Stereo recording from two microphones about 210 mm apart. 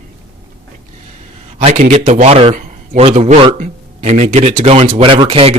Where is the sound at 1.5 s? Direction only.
35° right (ahead or behind).